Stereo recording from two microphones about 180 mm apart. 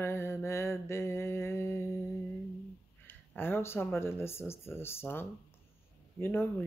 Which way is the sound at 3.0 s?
10° left (ahead or behind).